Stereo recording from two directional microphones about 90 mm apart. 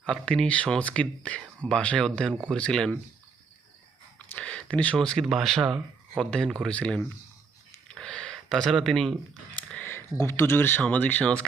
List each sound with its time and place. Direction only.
0.3 s speech: 10° left (ahead or behind)
4.4 s speech: 10° left (ahead or behind)
7.9 s a sound: 10° left (ahead or behind)
9.8 s speech: 25° left (ahead or behind)